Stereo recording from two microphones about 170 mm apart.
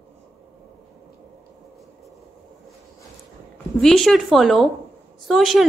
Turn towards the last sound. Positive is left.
turn(degrees=0)  # may be behind; listen again after turning